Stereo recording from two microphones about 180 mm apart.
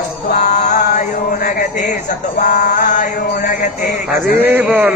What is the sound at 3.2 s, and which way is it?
Music, 60° left (ahead or behind).